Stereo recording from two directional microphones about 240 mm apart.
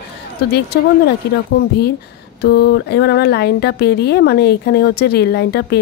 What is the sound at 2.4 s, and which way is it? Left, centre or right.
A woman's voice, left.